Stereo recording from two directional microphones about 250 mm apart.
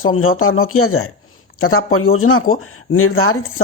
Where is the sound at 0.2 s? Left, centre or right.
Left.